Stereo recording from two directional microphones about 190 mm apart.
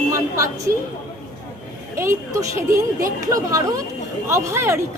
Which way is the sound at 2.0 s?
15° right (ahead or behind).